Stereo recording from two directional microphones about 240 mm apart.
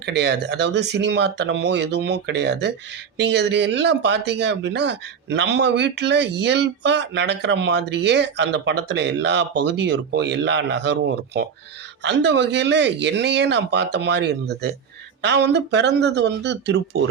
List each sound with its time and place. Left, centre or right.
0.0 s speech: right